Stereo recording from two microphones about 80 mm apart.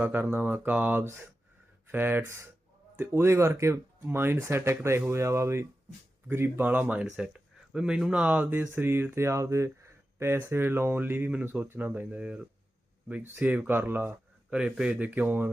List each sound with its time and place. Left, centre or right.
0.0 s speech: right
14.5 s speech: centre